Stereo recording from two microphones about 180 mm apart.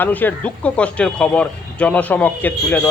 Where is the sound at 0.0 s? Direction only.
10° left (ahead or behind).